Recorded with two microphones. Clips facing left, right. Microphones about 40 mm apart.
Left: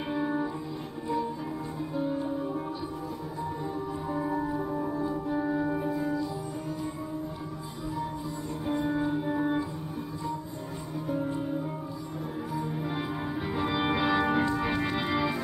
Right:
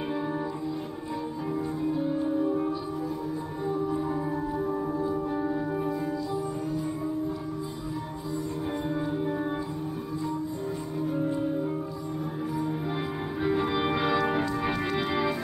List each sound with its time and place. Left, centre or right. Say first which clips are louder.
0.1 s music: left 4 dB; centre
1.8 s music: right 1 dB; centre
5.3 s music: even; centre
8.8 s music: even; centre
12.9 s music: right 1 dB; centre